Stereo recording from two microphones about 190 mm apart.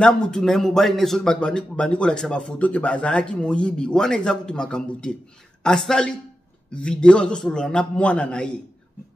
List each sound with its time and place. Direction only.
0.0 s a man's voice: 5° left (ahead or behind)